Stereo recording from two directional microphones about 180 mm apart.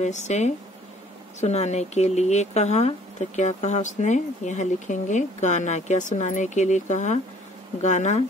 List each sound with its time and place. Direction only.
0.0 s speech: 40° left (ahead or behind)